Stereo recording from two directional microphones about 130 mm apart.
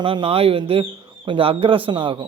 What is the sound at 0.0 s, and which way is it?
Speech, 40° right (ahead or behind).